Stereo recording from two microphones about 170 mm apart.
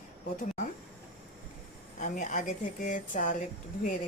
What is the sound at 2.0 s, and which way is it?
Speech, 45° left (ahead or behind).